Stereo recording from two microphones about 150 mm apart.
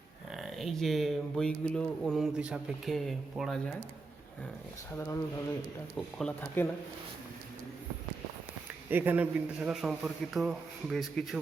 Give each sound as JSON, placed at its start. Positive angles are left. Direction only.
{"t": 0.3, "sound": "speech", "side_deg": 0}
{"t": 6.1, "sound": "speech", "side_deg": 10}
{"t": 8.9, "sound": "speech", "side_deg": -15}